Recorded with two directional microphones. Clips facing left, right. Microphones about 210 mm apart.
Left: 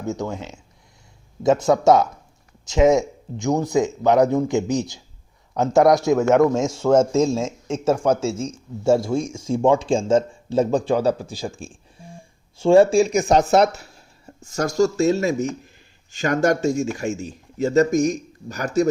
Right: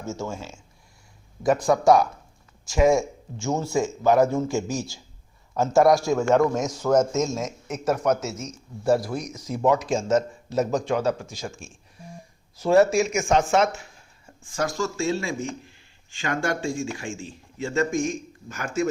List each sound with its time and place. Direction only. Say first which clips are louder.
0.0 s a man's voice: left 5 dB; 15° left (ahead or behind); by 18.9 s 40° left (ahead or behind)